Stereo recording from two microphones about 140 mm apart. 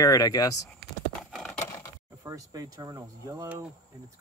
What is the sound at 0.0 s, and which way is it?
Speech, 25° left (ahead or behind).